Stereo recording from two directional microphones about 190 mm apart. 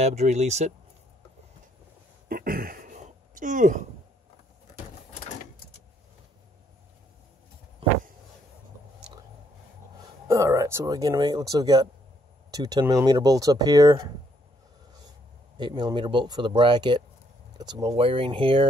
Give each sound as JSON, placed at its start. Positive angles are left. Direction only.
{"t": 0.0, "sound": "speech", "side_deg": -35}
{"t": 2.2, "sound": "a sound", "side_deg": -50}
{"t": 10.2, "sound": "speech", "side_deg": -15}
{"t": 15.5, "sound": "speech", "side_deg": -25}